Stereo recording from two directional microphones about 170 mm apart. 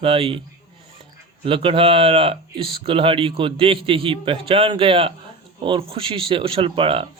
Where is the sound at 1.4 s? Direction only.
30° right (ahead or behind).